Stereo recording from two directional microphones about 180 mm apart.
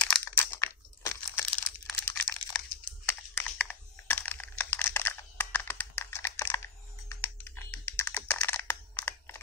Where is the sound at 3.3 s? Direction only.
10° left (ahead or behind).